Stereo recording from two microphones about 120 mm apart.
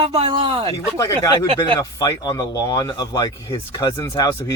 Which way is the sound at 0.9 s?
25° left (ahead or behind).